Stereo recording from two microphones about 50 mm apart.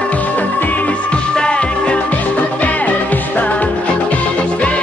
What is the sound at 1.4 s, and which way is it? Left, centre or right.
Music, left.